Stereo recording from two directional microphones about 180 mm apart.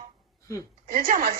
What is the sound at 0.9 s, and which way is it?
Speech, 50° right (ahead or behind).